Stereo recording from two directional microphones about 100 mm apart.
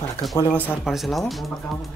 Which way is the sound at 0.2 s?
Centre (ahead or behind).